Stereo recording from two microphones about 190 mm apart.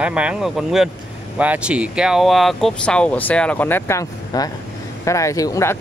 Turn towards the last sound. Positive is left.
turn(degrees=15)  # may be behind; listen again after turning